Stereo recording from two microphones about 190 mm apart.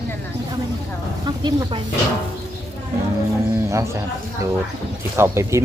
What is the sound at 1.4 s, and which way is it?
Speech, 25° right (ahead or behind).